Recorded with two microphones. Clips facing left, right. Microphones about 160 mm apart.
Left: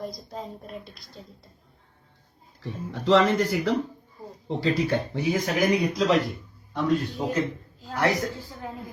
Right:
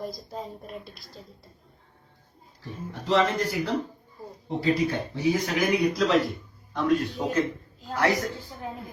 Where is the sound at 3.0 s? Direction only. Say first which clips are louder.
Left 4 dB; 90° left.